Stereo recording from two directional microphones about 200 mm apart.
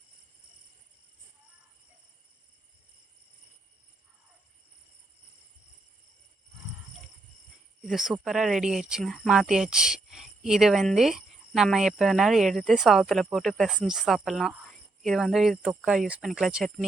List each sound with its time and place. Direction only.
7.9 s speech: centre (ahead or behind)